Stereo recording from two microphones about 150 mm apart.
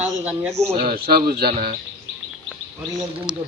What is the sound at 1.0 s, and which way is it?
Speech, 90° right.